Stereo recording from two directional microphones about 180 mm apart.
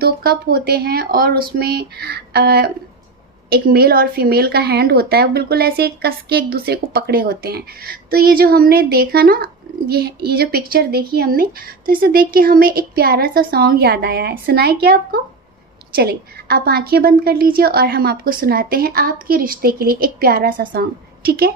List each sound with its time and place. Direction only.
0.0 s a woman's voice: 55° right (ahead or behind)